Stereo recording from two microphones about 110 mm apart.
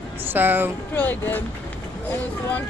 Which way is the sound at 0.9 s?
15° left (ahead or behind).